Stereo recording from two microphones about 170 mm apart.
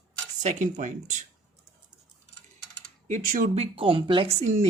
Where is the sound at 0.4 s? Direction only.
45° right (ahead or behind).